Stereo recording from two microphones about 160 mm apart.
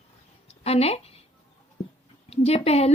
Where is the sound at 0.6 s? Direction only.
40° left (ahead or behind).